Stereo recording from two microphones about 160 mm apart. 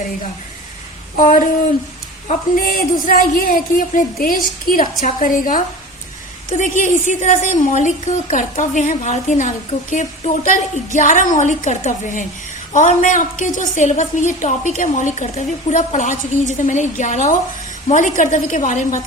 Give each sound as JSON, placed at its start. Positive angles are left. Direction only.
{"t": 1.1, "sound": "speech", "side_deg": 55}
{"t": 2.6, "sound": "a woman's voice", "side_deg": 65}